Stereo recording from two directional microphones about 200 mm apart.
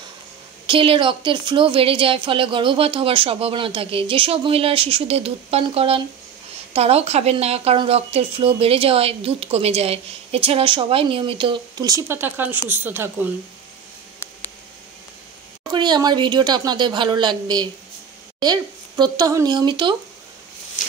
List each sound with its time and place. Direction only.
0.7 s speech: 25° right (ahead or behind); by 13.3 s 10° right (ahead or behind)
15.7 s speech: 20° right (ahead or behind)